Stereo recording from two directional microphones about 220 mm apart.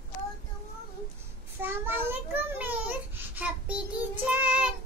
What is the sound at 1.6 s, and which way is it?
A child's voice, 10° right (ahead or behind).